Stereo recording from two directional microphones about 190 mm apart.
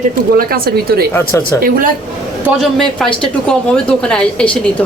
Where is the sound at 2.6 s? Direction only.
Centre (ahead or behind).